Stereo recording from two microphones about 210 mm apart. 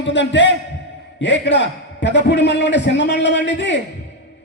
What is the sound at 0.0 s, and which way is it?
A man's voice, 60° left (ahead or behind).